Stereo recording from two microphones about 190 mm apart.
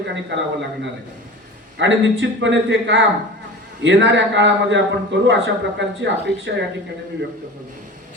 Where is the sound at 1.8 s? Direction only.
75° right (ahead or behind).